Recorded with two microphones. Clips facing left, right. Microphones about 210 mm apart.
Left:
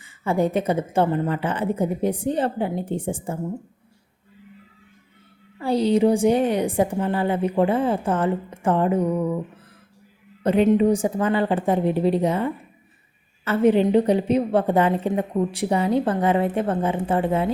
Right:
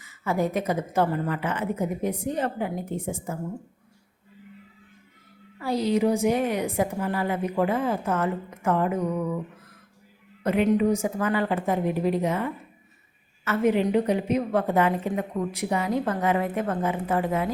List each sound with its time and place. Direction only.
0.0 s a woman's voice: 30° left (ahead or behind)
5.5 s a woman's voice: 30° left (ahead or behind)
10.4 s a woman's voice: 30° left (ahead or behind)